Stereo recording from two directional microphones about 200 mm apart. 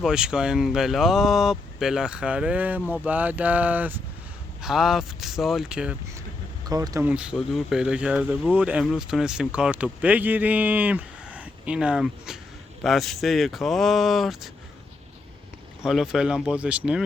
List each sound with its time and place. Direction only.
0.0 s speech: 5° right (ahead or behind)
6.7 s speech: 15° right (ahead or behind); by 14.5 s centre (ahead or behind)
15.8 s speech: centre (ahead or behind)